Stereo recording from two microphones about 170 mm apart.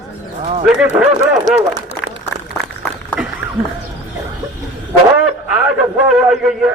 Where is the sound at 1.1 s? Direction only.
45° right (ahead or behind).